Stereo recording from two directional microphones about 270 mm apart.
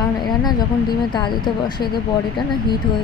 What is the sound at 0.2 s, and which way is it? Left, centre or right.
Speech, centre.